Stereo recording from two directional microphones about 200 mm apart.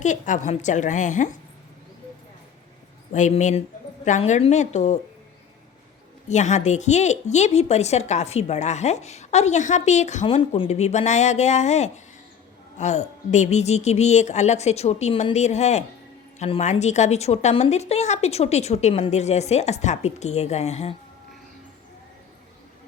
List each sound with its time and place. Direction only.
0.0 s a woman's voice: 40° left (ahead or behind)
3.1 s a woman's voice: 35° left (ahead or behind)
6.2 s a woman's voice: 35° left (ahead or behind)